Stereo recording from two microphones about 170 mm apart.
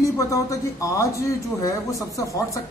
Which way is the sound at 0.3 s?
20° left (ahead or behind).